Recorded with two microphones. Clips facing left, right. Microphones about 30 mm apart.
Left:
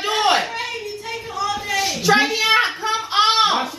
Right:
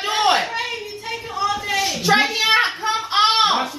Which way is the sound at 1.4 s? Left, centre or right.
Right.